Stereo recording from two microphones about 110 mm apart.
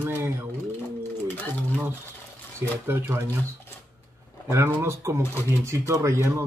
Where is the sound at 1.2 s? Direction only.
15° left (ahead or behind).